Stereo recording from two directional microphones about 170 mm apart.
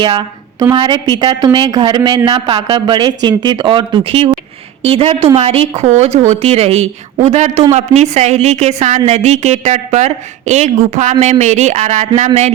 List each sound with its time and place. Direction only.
0.0 s a woman's voice: 25° right (ahead or behind); by 12.5 s 40° right (ahead or behind)